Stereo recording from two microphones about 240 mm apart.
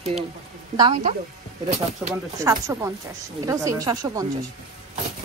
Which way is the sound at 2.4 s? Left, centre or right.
Centre.